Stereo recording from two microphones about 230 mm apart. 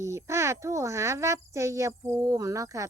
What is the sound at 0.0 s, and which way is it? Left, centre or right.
Speech, centre.